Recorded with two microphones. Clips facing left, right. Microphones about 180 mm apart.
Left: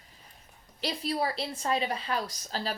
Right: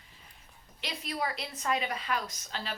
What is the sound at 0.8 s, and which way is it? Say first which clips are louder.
A woman's voice: left 5 dB; 35° left (ahead or behind).